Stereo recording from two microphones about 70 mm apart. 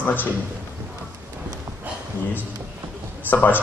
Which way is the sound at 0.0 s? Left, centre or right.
Left.